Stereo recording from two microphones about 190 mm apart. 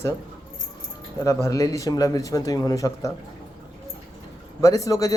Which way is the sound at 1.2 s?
15° left (ahead or behind).